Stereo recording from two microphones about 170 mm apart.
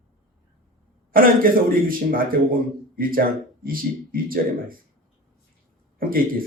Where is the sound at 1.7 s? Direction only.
55° right (ahead or behind).